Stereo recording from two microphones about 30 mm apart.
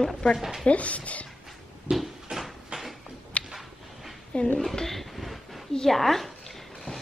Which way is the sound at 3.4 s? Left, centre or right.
Left.